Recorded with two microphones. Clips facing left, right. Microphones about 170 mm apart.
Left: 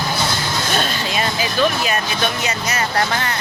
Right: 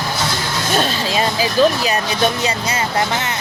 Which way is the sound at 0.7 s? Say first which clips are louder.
Right 6 dB; 35° right (ahead or behind).